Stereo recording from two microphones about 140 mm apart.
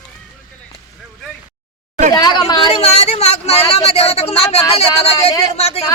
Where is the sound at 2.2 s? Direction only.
30° left (ahead or behind).